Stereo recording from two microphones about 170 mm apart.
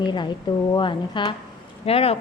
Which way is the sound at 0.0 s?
25° left (ahead or behind).